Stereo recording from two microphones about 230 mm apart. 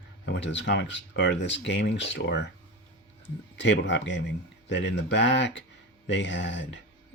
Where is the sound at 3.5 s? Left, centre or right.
Left.